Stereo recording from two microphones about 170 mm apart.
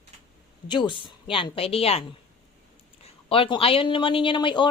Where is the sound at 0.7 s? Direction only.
30° left (ahead or behind).